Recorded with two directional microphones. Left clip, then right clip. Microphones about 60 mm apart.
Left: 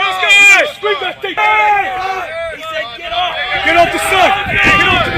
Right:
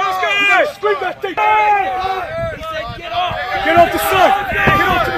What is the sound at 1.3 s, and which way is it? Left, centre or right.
Speech, left.